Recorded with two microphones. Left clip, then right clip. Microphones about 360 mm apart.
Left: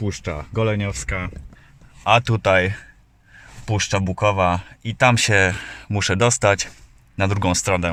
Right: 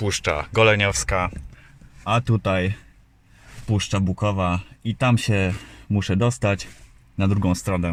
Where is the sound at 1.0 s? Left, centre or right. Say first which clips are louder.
Right 5 dB; centre.